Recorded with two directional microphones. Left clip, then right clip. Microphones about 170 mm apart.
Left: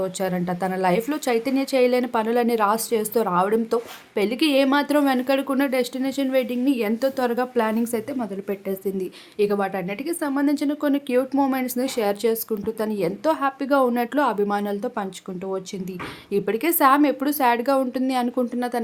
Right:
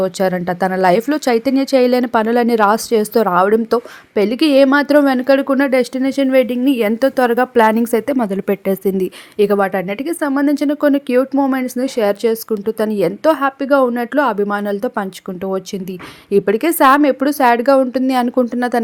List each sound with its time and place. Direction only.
0.0 s speech: 40° right (ahead or behind)
11.3 s speech: 25° right (ahead or behind)
16.3 s speech: 35° right (ahead or behind)